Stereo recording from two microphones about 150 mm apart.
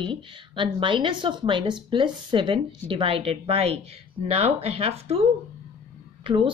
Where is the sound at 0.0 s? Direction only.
35° right (ahead or behind).